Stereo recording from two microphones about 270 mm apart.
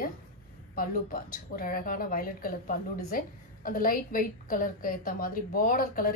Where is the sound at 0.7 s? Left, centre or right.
Left.